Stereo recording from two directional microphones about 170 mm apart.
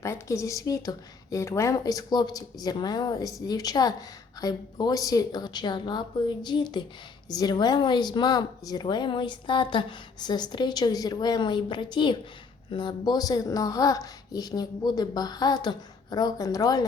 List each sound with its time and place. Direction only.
0.0 s speech: 15° left (ahead or behind)